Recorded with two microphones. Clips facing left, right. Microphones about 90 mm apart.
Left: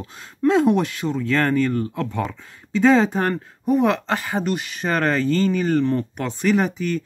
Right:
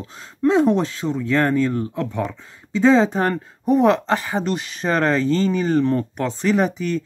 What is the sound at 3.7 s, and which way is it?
Speech, 35° right (ahead or behind).